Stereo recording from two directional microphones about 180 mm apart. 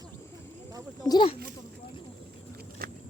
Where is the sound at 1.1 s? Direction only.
25° left (ahead or behind).